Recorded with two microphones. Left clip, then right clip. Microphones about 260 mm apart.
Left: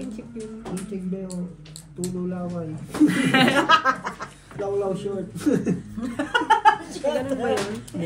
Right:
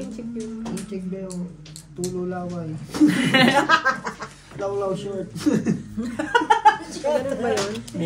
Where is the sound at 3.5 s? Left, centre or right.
Left.